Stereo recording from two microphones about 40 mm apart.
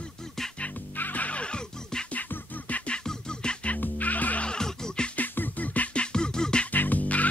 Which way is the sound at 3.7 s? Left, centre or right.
Left.